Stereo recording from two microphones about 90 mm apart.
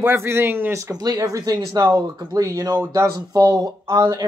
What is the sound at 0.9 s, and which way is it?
Speech, 45° right (ahead or behind).